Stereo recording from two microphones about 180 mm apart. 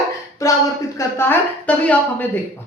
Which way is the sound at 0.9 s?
15° left (ahead or behind).